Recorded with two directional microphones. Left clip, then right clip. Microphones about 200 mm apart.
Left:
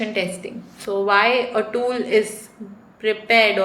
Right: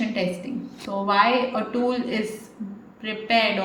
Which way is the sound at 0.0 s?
35° left (ahead or behind).